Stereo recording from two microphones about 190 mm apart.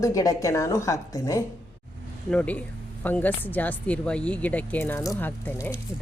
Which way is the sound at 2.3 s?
5° left (ahead or behind).